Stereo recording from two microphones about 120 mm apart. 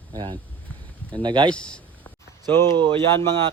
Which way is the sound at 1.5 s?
10° left (ahead or behind).